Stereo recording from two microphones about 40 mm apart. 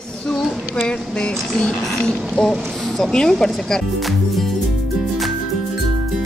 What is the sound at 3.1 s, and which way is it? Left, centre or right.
Speech, centre.